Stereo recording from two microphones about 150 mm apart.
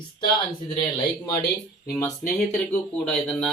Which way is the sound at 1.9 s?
20° left (ahead or behind).